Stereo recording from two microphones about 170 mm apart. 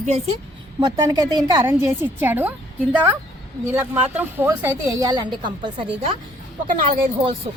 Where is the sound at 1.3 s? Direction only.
25° right (ahead or behind).